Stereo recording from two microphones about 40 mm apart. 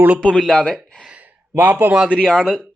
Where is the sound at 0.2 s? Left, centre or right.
Left.